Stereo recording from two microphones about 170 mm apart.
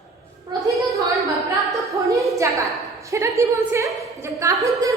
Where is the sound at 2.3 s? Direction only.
20° right (ahead or behind).